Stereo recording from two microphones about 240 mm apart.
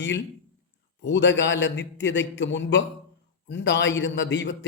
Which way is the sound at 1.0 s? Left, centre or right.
Left.